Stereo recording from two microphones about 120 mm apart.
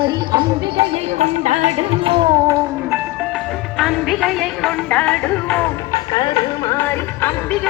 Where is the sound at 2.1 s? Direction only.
45° right (ahead or behind).